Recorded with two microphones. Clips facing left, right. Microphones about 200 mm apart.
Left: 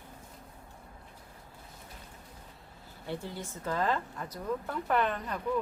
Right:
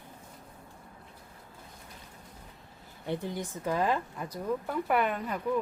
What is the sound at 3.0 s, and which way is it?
Speech, 15° right (ahead or behind).